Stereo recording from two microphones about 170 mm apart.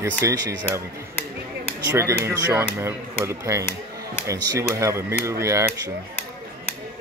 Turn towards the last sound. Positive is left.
turn(degrees=-15)  # may be behind; listen again after turning